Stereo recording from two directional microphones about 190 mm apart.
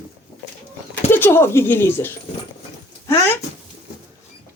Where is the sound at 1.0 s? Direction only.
10° left (ahead or behind).